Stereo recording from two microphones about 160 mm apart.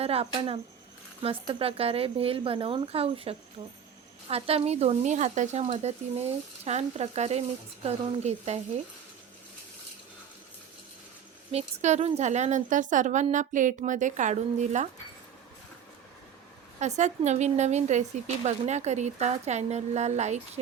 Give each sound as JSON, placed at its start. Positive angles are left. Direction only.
{"t": 0.0, "sound": "speech", "side_deg": -40}
{"t": 11.5, "sound": "speech", "side_deg": -45}
{"t": 16.8, "sound": "speech", "side_deg": -45}